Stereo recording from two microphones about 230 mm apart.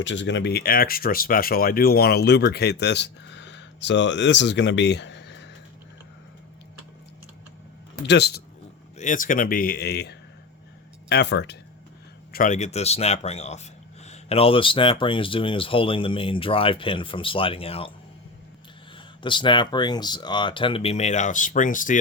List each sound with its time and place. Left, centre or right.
0.0 s speech: left
8.0 s speech: left
9.0 s speech: left
12.3 s speech: left
18.9 s speech: left